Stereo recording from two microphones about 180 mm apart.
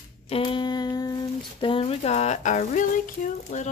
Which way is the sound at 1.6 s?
30° left (ahead or behind).